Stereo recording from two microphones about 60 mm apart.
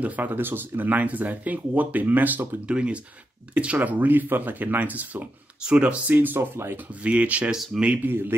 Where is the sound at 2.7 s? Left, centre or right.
Centre.